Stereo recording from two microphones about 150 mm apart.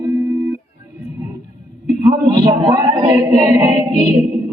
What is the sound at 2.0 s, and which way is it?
Speech, 25° right (ahead or behind).